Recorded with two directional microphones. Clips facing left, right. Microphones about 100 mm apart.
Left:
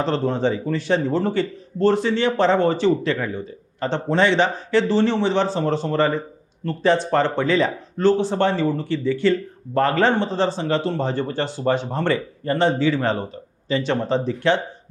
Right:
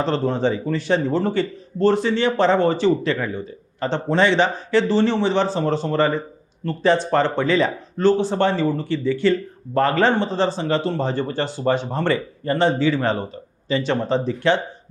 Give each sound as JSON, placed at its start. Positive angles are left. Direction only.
{"t": 0.0, "sound": "speech", "side_deg": -20}